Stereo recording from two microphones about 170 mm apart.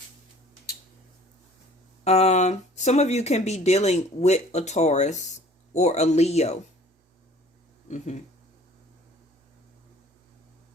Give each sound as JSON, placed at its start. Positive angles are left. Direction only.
{"t": 2.0, "sound": "speech", "side_deg": 40}
{"t": 7.9, "sound": "speech", "side_deg": 45}